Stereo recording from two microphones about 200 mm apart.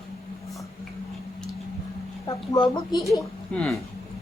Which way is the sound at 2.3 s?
20° left (ahead or behind).